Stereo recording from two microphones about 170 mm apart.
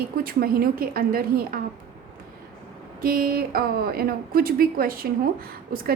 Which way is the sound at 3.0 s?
60° right (ahead or behind).